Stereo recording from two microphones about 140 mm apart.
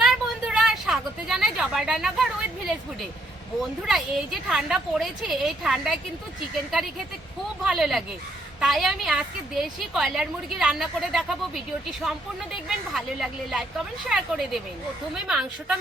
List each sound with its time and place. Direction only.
0.0 s a sound: 5° right (ahead or behind)
3.6 s a woman's voice: centre (ahead or behind)
7.6 s a woman's voice: centre (ahead or behind)
12.6 s a woman's voice: centre (ahead or behind)